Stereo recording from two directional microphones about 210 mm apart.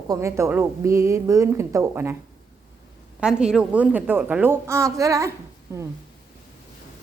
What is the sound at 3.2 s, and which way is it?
A woman's voice, 5° right (ahead or behind).